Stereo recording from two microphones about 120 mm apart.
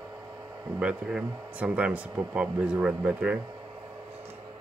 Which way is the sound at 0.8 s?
10° right (ahead or behind).